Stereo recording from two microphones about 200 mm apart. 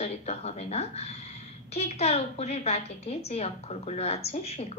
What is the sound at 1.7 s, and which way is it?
A woman's voice, 30° left (ahead or behind).